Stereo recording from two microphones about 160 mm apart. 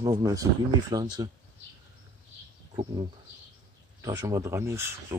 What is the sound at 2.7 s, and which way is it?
Speech, 30° right (ahead or behind).